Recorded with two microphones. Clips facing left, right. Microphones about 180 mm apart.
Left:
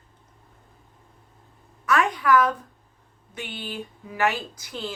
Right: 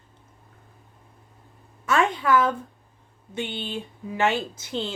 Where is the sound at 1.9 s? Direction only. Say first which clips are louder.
Even; 25° right (ahead or behind).